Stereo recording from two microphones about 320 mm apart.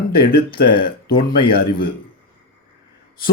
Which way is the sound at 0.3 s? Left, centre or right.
Left.